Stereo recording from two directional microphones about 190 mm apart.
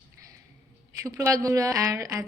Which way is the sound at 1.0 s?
15° right (ahead or behind).